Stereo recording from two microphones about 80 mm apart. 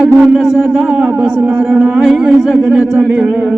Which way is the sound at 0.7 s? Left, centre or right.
Centre.